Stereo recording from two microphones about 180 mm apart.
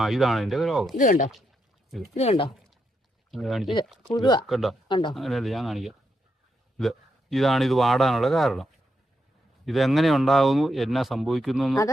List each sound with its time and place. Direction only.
0.0 s speech: centre (ahead or behind)
0.9 s speech: 45° left (ahead or behind)
2.1 s speech: 35° left (ahead or behind)
3.3 s speech: centre (ahead or behind)
4.1 s speech: 25° left (ahead or behind)
4.4 s speech: centre (ahead or behind)
4.9 s speech: 25° left (ahead or behind)
5.1 s speech: centre (ahead or behind)
9.6 s speech: centre (ahead or behind)